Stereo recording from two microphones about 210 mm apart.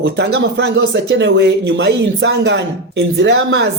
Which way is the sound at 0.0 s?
55° right (ahead or behind).